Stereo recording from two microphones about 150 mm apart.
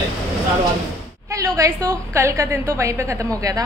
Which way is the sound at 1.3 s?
20° right (ahead or behind).